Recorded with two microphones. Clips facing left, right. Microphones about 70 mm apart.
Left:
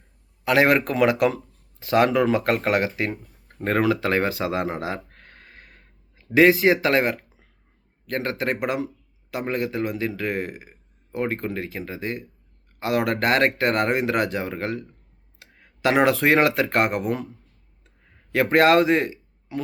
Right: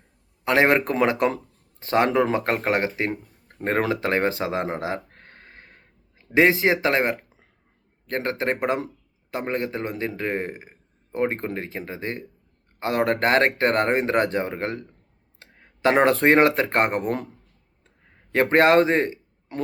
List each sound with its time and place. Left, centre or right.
0.4 s a man's voice: right
15.4 s a sound: right
16.2 s a man's voice: right
18.5 s speech: right